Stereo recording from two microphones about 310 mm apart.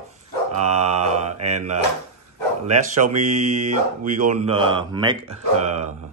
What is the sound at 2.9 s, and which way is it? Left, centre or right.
Speech, right.